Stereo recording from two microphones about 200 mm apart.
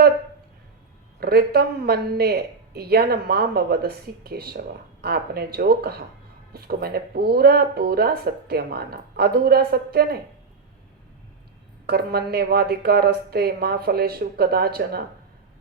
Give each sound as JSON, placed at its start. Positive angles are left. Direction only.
{"t": 1.2, "sound": "speech", "side_deg": -50}
{"t": 11.9, "sound": "speech", "side_deg": -50}